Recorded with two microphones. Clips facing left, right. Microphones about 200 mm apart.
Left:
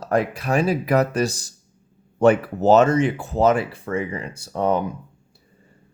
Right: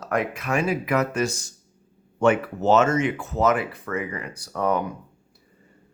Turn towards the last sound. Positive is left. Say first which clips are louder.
# left 3 dB
turn(degrees=25)  # may be behind; listen again after turning